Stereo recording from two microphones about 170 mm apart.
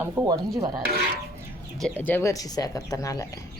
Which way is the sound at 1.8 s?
10° left (ahead or behind).